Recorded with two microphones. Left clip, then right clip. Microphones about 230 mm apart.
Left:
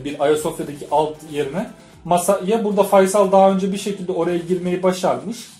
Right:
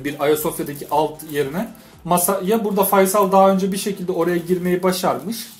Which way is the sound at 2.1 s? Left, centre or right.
Right.